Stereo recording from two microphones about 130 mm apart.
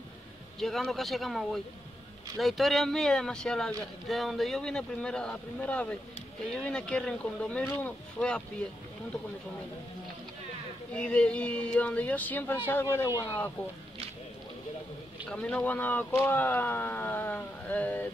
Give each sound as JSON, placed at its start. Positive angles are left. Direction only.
{"t": 0.6, "sound": "speech", "side_deg": 0}
{"t": 10.9, "sound": "speech", "side_deg": 10}
{"t": 15.2, "sound": "speech", "side_deg": 10}